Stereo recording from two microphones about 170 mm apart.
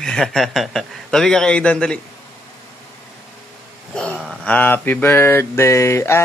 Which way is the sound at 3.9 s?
5° left (ahead or behind).